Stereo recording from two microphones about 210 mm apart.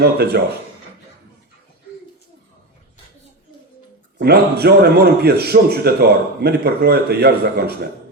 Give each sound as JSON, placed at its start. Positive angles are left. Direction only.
{"t": 0.0, "sound": "a man's voice", "side_deg": -50}
{"t": 4.2, "sound": "a man's voice", "side_deg": -50}